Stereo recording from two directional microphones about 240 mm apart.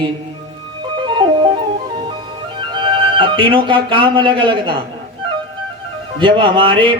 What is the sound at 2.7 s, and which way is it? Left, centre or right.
Speech, centre.